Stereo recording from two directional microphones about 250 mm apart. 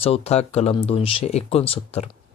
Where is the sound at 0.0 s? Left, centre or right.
Left.